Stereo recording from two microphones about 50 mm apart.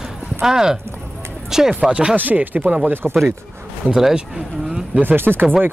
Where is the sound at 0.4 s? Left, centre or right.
Centre.